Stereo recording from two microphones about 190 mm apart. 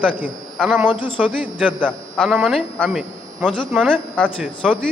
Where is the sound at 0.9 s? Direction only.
25° left (ahead or behind).